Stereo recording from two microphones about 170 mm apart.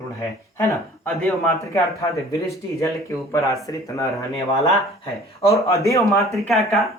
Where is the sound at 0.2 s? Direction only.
15° left (ahead or behind).